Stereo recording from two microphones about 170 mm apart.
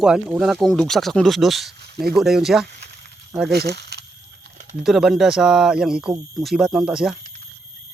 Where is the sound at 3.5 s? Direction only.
75° right (ahead or behind).